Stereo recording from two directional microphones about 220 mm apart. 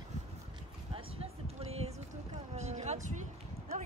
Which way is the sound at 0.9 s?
25° right (ahead or behind).